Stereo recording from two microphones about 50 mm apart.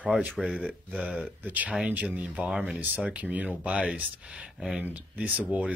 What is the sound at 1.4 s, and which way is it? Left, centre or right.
Speech, right.